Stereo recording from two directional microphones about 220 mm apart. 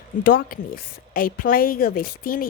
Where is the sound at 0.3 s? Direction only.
40° left (ahead or behind).